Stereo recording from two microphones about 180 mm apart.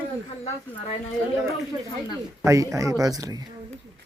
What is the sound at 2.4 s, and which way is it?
Speech, 20° right (ahead or behind).